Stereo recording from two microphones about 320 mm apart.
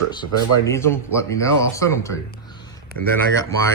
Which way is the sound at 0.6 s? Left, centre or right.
Centre.